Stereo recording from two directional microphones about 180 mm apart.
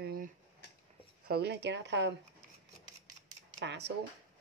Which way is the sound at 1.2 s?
65° right (ahead or behind).